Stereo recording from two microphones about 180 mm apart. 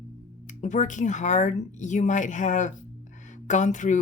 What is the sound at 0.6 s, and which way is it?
Speech, 45° left (ahead or behind).